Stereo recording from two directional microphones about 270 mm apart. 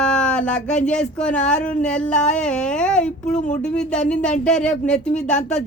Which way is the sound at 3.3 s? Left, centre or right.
Left.